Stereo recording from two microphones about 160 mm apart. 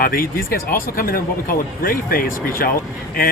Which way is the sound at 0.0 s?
65° left (ahead or behind).